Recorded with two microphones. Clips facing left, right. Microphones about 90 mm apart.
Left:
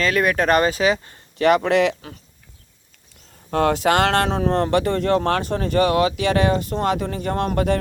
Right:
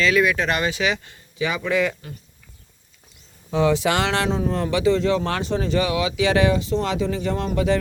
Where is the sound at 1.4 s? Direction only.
75° left (ahead or behind).